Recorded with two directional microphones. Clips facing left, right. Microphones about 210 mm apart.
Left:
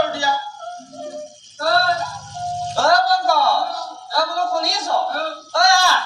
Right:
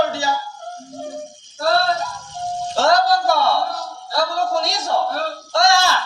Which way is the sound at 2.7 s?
20° right (ahead or behind).